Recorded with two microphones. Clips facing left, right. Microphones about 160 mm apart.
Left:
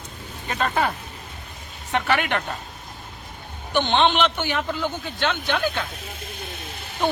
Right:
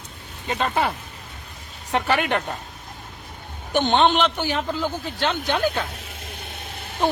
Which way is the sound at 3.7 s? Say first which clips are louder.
Right 2 dB; 45° right (ahead or behind).